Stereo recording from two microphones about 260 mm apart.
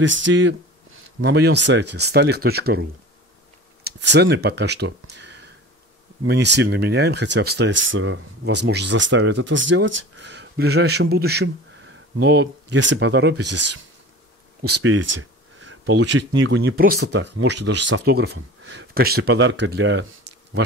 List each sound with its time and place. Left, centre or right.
0.0 s speech: right
5.0 s a sound: right
6.2 s speech: right